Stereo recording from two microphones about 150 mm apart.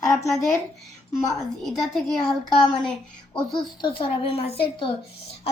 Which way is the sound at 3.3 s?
30° left (ahead or behind).